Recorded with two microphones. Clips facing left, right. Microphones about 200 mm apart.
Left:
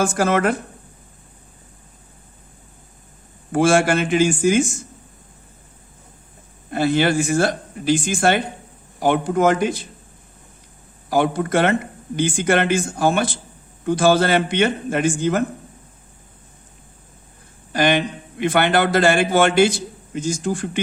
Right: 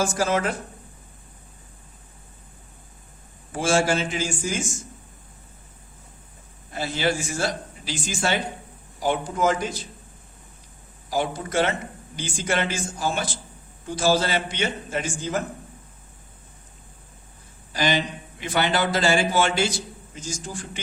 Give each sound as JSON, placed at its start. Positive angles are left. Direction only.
{"t": 0.0, "sound": "a man's voice", "side_deg": 55}
{"t": 3.5, "sound": "a man's voice", "side_deg": 60}
{"t": 6.7, "sound": "a man's voice", "side_deg": 60}
{"t": 11.1, "sound": "a man's voice", "side_deg": 60}
{"t": 17.7, "sound": "a man's voice", "side_deg": 60}